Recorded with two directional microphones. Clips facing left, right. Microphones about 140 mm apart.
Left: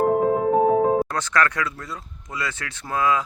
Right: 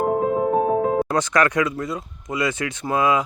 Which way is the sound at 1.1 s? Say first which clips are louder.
Right 4 dB; 15° right (ahead or behind).